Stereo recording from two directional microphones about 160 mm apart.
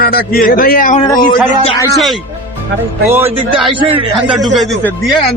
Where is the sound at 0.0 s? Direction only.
65° left (ahead or behind).